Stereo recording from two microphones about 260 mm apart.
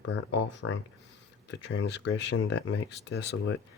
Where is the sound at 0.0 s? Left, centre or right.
Left.